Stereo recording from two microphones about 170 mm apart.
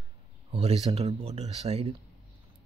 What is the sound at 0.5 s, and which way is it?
Speech, 35° right (ahead or behind).